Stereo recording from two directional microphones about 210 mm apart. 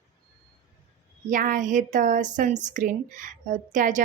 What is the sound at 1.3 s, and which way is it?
A woman's voice, 40° right (ahead or behind).